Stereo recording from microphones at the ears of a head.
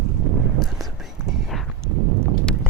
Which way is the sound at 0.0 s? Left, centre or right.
Right.